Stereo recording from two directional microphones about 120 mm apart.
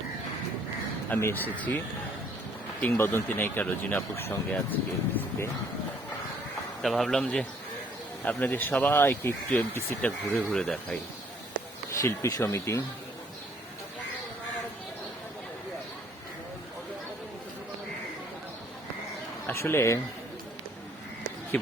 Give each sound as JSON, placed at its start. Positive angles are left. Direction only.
{"t": 1.1, "sound": "speech", "side_deg": 15}
{"t": 2.8, "sound": "speech", "side_deg": 15}
{"t": 6.8, "sound": "speech", "side_deg": 0}
{"t": 11.9, "sound": "speech", "side_deg": 25}
{"t": 19.5, "sound": "speech", "side_deg": 20}
{"t": 21.5, "sound": "speech", "side_deg": 15}